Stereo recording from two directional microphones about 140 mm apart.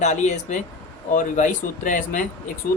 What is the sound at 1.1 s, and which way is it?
Speech, 70° left (ahead or behind).